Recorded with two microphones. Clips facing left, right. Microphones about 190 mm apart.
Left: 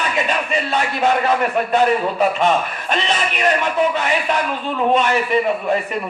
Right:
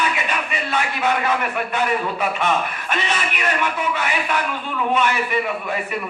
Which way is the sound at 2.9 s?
35° left (ahead or behind).